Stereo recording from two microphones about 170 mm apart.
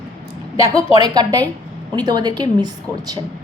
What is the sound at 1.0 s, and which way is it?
A woman's voice, 25° right (ahead or behind).